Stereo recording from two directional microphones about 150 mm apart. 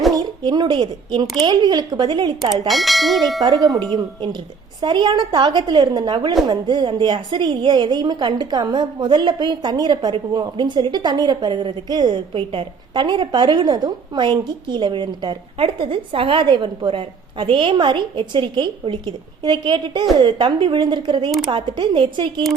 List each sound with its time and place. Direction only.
0.2 s a woman's voice: 30° right (ahead or behind)
2.6 s bell: centre (ahead or behind)
3.8 s a woman's voice: 30° right (ahead or behind)